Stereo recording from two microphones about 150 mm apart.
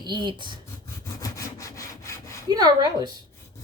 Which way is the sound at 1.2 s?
20° left (ahead or behind).